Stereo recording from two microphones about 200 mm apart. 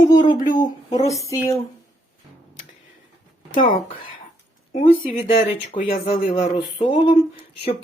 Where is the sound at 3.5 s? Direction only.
45° left (ahead or behind).